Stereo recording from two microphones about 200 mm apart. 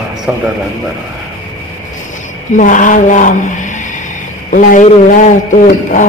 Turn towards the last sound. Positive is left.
turn(degrees=40)  # may be behind; listen again after turning